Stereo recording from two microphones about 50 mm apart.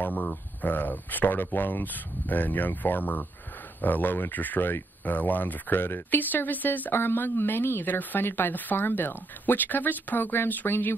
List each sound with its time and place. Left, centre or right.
0.0 s speech: left